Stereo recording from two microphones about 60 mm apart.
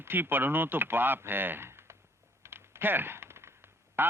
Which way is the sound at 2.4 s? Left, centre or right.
Right.